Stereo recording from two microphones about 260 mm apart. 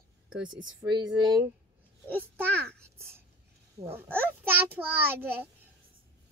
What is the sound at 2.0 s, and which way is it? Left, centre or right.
Speech, centre.